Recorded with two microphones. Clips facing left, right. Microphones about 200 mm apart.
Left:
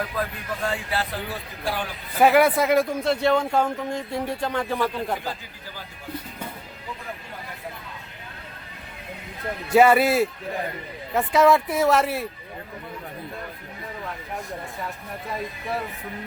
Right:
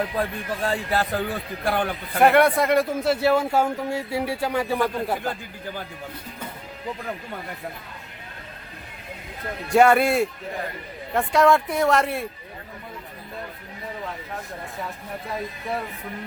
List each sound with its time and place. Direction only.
0.2 s a man's voice: 35° right (ahead or behind); by 2.0 s 55° right (ahead or behind)
2.1 s a man's voice: centre (ahead or behind)
9.6 s speech: centre (ahead or behind)